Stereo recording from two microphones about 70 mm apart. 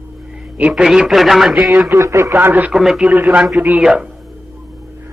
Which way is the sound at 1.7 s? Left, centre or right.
Right.